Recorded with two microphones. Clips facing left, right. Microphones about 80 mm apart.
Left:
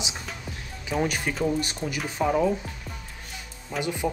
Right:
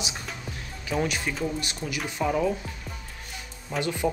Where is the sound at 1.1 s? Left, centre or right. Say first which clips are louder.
Left 1 dB; left.